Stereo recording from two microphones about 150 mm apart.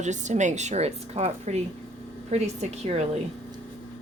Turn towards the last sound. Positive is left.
turn(degrees=-45)  # may be behind; listen again after turning